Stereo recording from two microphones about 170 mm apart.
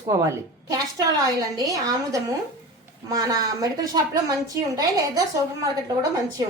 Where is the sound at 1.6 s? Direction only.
20° right (ahead or behind).